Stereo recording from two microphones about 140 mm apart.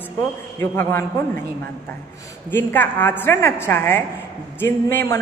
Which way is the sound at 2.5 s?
15° left (ahead or behind).